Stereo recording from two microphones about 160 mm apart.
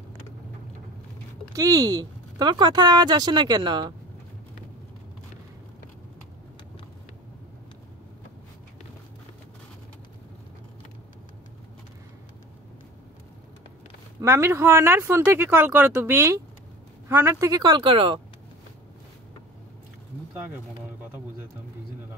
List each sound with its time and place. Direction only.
1.5 s speech: 20° right (ahead or behind)
14.2 s speech: 15° right (ahead or behind); by 18.2 s 30° right (ahead or behind)